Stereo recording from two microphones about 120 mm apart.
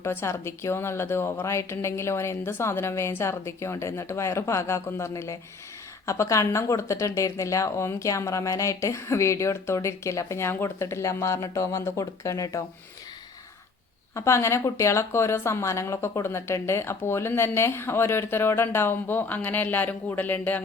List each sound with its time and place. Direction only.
0.0 s speech: 20° left (ahead or behind)
14.2 s speech: 25° left (ahead or behind)